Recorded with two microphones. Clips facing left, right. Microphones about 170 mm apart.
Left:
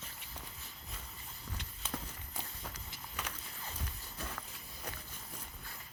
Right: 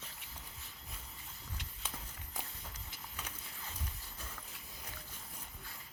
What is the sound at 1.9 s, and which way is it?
Walk, 90° left.